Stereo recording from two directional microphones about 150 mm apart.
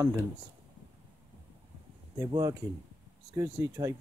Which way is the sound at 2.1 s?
20° right (ahead or behind).